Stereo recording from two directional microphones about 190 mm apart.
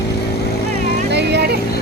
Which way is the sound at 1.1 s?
65° right (ahead or behind).